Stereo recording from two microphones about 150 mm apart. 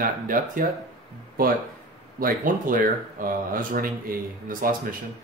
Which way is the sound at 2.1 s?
70° right (ahead or behind).